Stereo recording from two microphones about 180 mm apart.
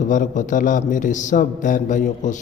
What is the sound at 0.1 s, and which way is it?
Mantra, 45° left (ahead or behind).